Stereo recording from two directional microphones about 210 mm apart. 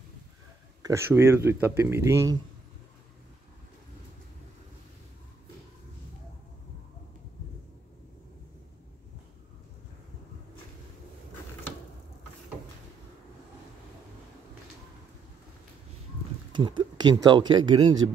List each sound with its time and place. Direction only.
0.8 s speech: 10° right (ahead or behind)
16.5 s speech: 20° right (ahead or behind)